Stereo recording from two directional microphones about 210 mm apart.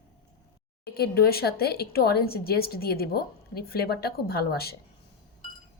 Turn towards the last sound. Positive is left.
turn(degrees=45)  # may be behind; listen again after turning